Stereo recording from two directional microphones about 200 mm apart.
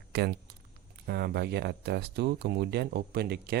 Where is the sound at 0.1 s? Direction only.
55° right (ahead or behind).